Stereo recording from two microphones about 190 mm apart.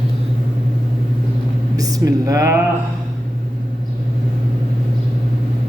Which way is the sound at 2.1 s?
15° right (ahead or behind).